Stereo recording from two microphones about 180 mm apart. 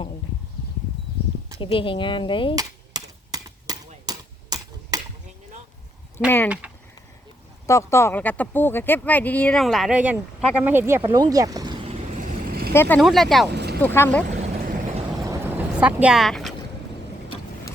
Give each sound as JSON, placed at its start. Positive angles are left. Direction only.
{"t": 1.5, "sound": "speech", "side_deg": 30}
{"t": 2.6, "sound": "a sound", "side_deg": -20}
{"t": 6.2, "sound": "speech", "side_deg": 10}
{"t": 6.6, "sound": "a sound", "side_deg": -10}
{"t": 7.7, "sound": "speech", "side_deg": 15}
{"t": 12.2, "sound": "vehicle", "side_deg": -55}
{"t": 12.7, "sound": "speech", "side_deg": 10}
{"t": 13.0, "sound": "speech", "side_deg": 0}
{"t": 13.5, "sound": "boat", "side_deg": -65}
{"t": 13.8, "sound": "speech", "side_deg": 10}
{"t": 14.3, "sound": "vehicle", "side_deg": -40}
{"t": 15.2, "sound": "vehicle", "side_deg": -15}